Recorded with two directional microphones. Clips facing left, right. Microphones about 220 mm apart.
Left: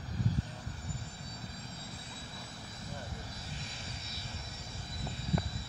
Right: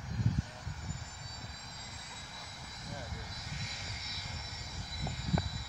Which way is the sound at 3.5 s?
30° left (ahead or behind).